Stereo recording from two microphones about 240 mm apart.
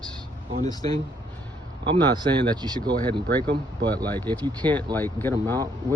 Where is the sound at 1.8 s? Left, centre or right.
Centre.